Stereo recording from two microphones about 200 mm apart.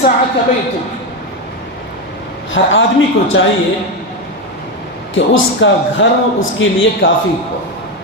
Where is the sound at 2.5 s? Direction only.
70° left (ahead or behind).